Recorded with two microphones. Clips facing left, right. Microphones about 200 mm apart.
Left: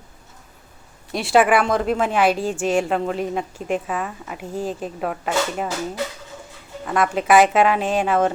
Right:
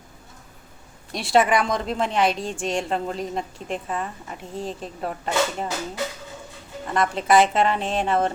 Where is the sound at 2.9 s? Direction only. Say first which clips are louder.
Left 4 dB; 65° left (ahead or behind).